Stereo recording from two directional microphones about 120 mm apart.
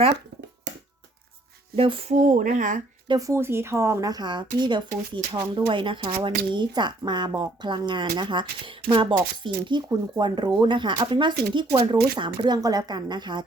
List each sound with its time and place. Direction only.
1.7 s speech: 50° right (ahead or behind)
2.1 s speech: 90° right
3.1 s speech: 30° right (ahead or behind)